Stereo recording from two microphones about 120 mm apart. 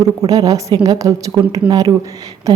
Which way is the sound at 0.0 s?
30° right (ahead or behind).